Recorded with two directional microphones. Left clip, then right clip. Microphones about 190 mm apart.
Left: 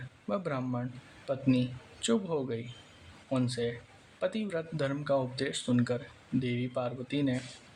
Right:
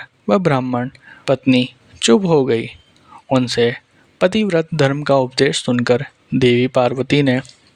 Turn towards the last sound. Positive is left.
turn(degrees=-55)  # may be behind; listen again after turning